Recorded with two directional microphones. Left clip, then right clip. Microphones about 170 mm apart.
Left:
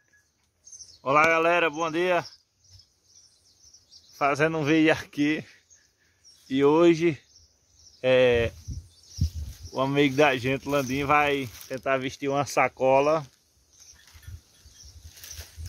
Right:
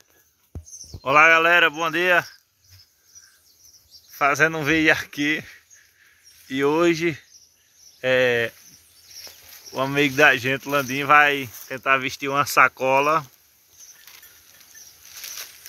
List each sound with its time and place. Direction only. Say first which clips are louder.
1.0 s speech: right 6 dB; 5° right (ahead or behind)
4.2 s speech: right 5 dB; 5° left (ahead or behind)
9.7 s speech: right 2 dB; 5° left (ahead or behind)